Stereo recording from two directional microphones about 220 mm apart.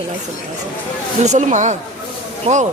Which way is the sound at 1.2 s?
35° right (ahead or behind).